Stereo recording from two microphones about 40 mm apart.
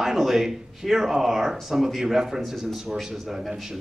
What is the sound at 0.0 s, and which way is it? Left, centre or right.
Speech, centre.